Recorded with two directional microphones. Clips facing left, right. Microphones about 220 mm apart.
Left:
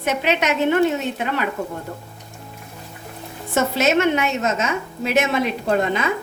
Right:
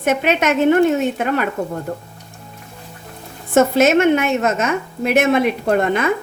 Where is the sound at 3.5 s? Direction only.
50° right (ahead or behind).